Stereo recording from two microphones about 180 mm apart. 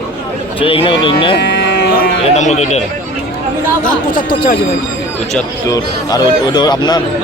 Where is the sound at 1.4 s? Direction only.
70° left (ahead or behind).